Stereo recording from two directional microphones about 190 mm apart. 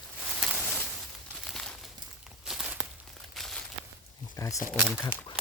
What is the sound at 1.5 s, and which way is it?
Bird, 5° left (ahead or behind).